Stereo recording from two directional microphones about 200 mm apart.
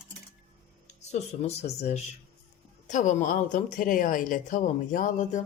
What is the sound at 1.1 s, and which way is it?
A woman's voice, 35° left (ahead or behind).